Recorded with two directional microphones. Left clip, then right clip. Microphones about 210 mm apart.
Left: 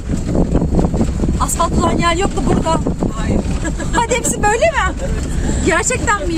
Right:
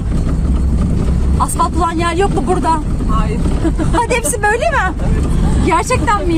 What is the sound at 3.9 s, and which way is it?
Speech, 25° right (ahead or behind).